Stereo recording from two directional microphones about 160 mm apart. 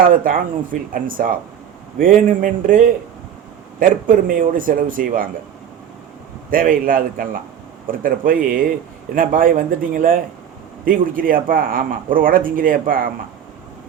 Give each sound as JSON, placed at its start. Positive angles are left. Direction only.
{"t": 0.0, "sound": "speech", "side_deg": -60}
{"t": 6.5, "sound": "speech", "side_deg": -60}